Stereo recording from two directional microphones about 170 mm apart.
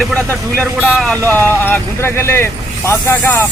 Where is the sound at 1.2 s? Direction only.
10° left (ahead or behind).